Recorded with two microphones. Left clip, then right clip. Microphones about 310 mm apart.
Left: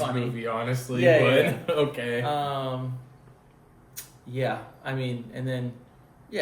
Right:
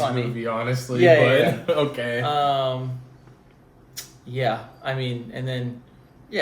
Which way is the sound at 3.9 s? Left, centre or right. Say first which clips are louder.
Right 3 dB; centre.